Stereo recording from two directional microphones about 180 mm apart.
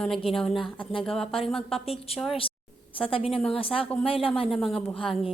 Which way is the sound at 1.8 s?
35° left (ahead or behind).